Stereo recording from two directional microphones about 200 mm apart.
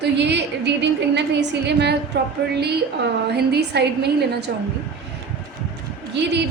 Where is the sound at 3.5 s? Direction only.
55° right (ahead or behind).